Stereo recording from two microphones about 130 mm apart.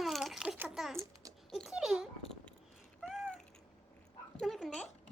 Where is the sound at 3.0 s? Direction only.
Centre (ahead or behind).